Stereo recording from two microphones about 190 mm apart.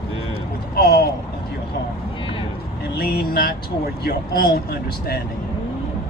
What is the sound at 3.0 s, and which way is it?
Speech, 55° left (ahead or behind).